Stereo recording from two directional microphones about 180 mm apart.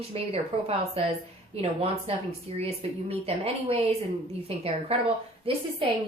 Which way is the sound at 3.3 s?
35° right (ahead or behind).